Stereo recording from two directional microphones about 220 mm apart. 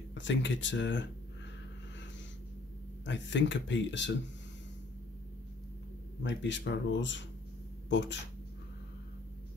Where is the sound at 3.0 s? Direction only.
55° left (ahead or behind).